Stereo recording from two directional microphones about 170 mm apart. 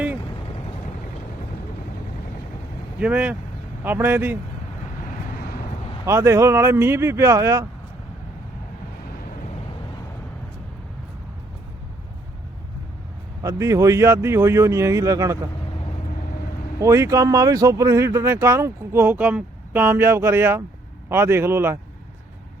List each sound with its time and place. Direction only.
3.0 s speech: 5° right (ahead or behind)
5.0 s vehicle: 60° left (ahead or behind)
6.1 s speech: 15° right (ahead or behind)
13.4 s speech: 15° right (ahead or behind)
16.8 s speech: 15° right (ahead or behind)